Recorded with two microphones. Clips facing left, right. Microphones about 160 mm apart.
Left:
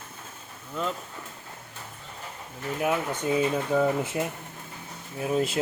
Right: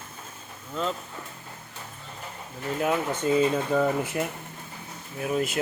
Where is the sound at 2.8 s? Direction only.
10° left (ahead or behind).